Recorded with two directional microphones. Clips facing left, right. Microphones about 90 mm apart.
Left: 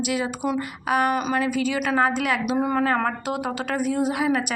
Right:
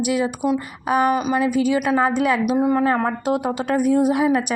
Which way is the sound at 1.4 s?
20° right (ahead or behind).